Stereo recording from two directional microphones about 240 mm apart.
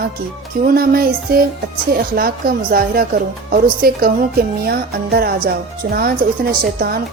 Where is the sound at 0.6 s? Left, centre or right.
Right.